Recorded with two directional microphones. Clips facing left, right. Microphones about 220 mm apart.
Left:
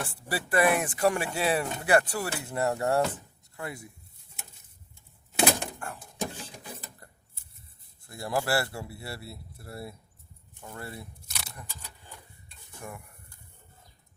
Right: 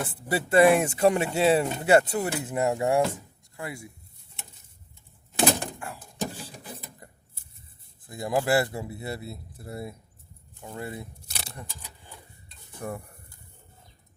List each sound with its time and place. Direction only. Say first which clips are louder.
0.0 s speech: right 5 dB; 20° right (ahead or behind)
5.6 s a sound: right 1 dB; 5° right (ahead or behind)
8.0 s speech: right 4 dB; 20° right (ahead or behind)
12.8 s stir: right 8 dB; 40° right (ahead or behind)